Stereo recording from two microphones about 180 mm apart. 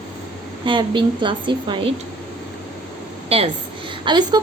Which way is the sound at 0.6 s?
25° right (ahead or behind).